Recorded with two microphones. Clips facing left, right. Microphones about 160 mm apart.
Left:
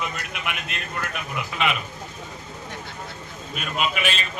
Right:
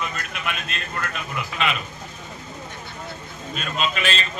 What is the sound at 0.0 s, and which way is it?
A man's voice, 15° left (ahead or behind).